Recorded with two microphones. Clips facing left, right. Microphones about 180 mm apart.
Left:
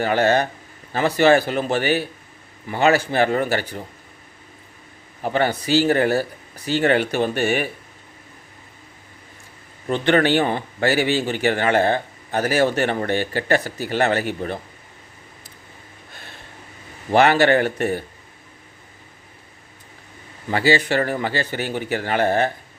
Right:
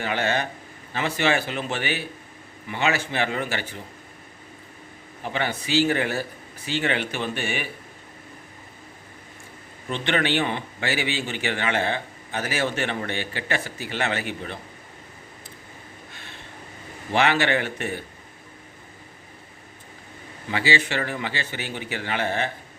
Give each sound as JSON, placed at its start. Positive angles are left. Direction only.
{"t": 0.0, "sound": "speech", "side_deg": 40}
{"t": 5.2, "sound": "speech", "side_deg": 40}
{"t": 9.9, "sound": "speech", "side_deg": 40}
{"t": 17.1, "sound": "speech", "side_deg": 40}
{"t": 20.5, "sound": "a man's voice", "side_deg": 40}